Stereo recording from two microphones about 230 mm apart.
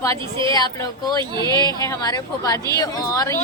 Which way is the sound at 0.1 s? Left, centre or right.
Right.